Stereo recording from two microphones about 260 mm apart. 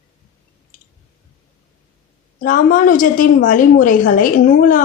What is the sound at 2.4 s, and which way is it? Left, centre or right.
A woman's voice, left.